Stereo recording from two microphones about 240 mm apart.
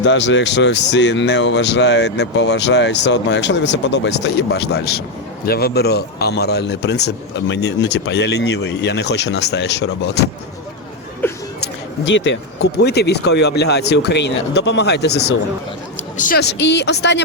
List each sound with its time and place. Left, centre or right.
0.0 s speech: left
11.6 s a sound: left
12.8 s speech: left